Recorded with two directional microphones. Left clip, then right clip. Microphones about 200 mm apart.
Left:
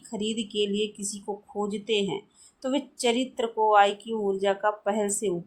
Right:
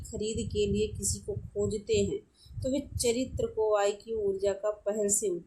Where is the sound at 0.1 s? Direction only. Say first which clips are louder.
Left 3 dB; 20° left (ahead or behind).